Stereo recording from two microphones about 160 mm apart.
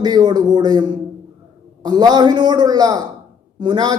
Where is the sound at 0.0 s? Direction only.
25° right (ahead or behind).